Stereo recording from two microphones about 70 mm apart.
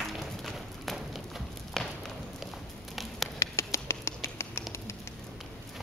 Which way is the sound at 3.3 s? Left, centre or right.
Left.